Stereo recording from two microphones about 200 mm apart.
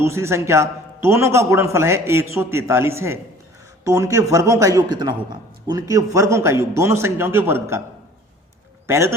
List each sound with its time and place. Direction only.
0.0 s a man's voice: 15° right (ahead or behind)
8.9 s a man's voice: 15° right (ahead or behind)